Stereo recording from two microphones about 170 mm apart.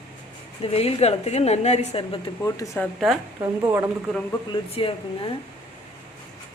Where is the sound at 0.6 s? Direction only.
35° left (ahead or behind).